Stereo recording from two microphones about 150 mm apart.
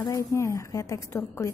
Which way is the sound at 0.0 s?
20° left (ahead or behind).